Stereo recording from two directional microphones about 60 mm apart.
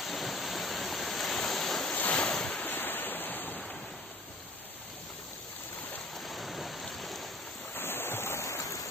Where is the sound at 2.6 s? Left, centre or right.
Left.